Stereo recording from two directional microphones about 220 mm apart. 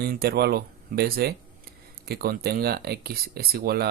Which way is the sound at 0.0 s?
45° right (ahead or behind).